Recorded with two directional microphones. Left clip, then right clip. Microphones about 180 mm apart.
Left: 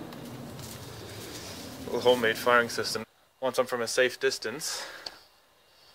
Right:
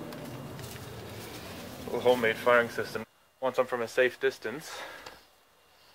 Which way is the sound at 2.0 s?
15° left (ahead or behind).